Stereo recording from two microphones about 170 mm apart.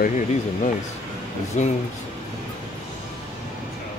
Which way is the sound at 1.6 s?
45° left (ahead or behind).